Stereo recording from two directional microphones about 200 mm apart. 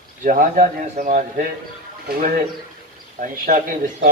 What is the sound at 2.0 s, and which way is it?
Speech, 50° right (ahead or behind).